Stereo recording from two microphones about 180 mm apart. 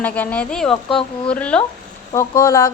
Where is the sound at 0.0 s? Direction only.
5° left (ahead or behind).